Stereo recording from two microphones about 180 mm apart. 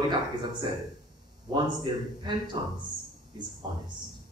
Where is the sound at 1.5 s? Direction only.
25° right (ahead or behind).